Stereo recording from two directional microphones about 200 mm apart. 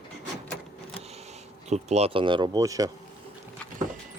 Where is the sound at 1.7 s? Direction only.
35° right (ahead or behind); by 2.9 s 15° right (ahead or behind).